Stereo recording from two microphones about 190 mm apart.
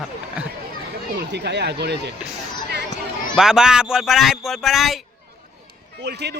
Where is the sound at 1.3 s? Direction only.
60° right (ahead or behind).